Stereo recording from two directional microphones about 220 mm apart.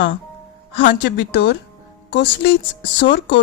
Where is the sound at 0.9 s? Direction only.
50° left (ahead or behind).